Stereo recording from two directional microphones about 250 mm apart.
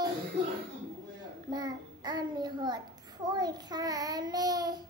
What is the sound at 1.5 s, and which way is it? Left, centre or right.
A child's voice, centre.